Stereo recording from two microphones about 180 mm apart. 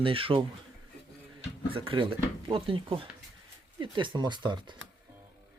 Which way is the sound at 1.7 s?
30° right (ahead or behind).